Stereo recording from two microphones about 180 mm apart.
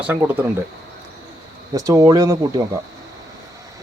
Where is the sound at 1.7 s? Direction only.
20° right (ahead or behind).